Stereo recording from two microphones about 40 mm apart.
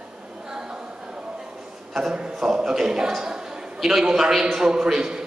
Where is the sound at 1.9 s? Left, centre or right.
Centre.